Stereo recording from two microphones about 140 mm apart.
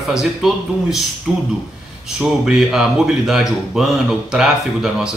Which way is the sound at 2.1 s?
5° right (ahead or behind).